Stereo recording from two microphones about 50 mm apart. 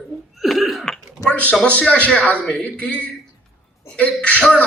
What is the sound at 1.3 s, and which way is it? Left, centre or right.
Speech, left.